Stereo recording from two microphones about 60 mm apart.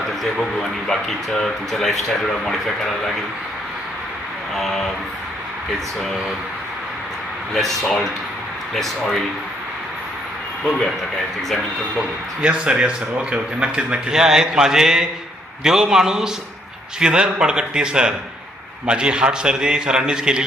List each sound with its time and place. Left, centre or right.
0.9 s speech: centre
7.5 s speech: centre
12.4 s a man's voice: centre